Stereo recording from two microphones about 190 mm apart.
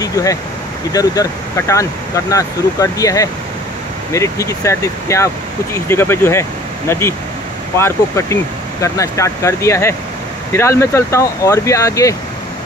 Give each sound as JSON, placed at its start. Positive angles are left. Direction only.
{"t": 0.0, "sound": "speech", "side_deg": 20}